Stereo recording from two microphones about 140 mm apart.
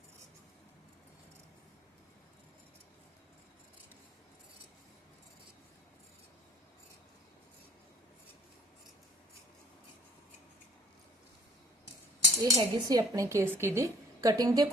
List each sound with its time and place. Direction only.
12.4 s speech: 25° right (ahead or behind)